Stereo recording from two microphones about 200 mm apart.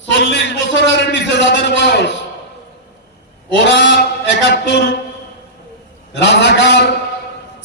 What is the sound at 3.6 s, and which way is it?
A man's voice, 65° left (ahead or behind).